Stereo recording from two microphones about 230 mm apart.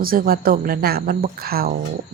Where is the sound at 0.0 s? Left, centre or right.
Right.